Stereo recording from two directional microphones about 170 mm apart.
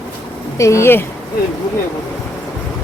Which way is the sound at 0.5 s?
15° left (ahead or behind).